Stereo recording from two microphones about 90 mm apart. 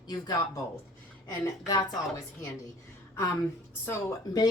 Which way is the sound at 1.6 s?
45° left (ahead or behind).